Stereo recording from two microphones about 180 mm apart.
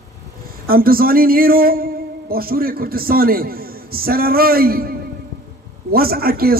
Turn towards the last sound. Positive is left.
turn(degrees=-55)  # may be behind; listen again after turning